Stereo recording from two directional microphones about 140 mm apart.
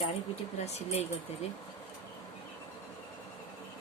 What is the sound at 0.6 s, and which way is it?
Speech, 50° left (ahead or behind).